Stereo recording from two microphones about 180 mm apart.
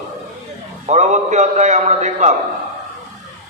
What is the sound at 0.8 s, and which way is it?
A man's voice, 40° right (ahead or behind).